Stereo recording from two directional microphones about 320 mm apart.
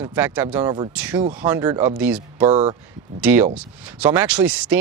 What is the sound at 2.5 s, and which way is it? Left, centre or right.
Speech, centre.